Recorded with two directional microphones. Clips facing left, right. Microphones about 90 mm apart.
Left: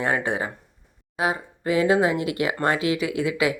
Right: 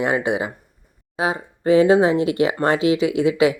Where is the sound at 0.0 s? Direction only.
15° right (ahead or behind).